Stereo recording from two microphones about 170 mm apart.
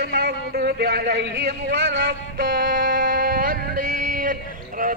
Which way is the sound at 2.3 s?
55° right (ahead or behind).